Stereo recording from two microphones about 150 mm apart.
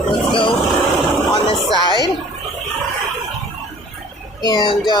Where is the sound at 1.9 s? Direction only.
25° right (ahead or behind).